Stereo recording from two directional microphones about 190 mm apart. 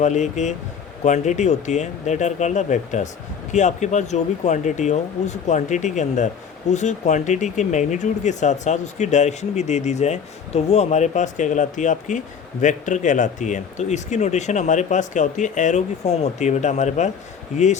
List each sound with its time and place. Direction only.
0.0 s speech: 40° left (ahead or behind)